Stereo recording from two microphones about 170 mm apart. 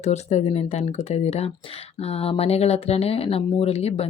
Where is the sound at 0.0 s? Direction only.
40° left (ahead or behind).